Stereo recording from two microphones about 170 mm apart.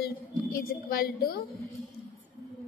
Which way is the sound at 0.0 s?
60° left (ahead or behind).